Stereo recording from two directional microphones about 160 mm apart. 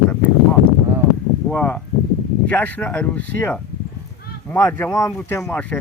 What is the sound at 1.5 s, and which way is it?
Speech, 10° left (ahead or behind).